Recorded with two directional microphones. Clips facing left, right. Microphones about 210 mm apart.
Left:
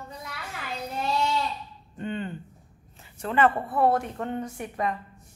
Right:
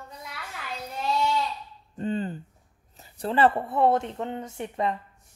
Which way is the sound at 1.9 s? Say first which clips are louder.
Right 3 dB; 35° right (ahead or behind).